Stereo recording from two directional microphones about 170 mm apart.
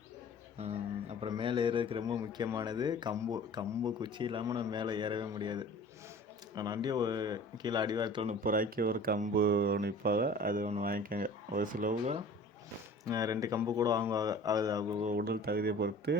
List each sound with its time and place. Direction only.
1.2 s speech: 30° right (ahead or behind)
8.3 s speech: 55° right (ahead or behind)
13.1 s speech: 20° right (ahead or behind)
15.2 s speech: 70° right (ahead or behind)